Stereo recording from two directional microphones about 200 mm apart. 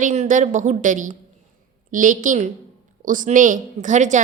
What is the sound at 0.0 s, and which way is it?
A woman's voice, 40° right (ahead or behind).